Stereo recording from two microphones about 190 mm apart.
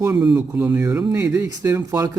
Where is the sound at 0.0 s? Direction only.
15° right (ahead or behind).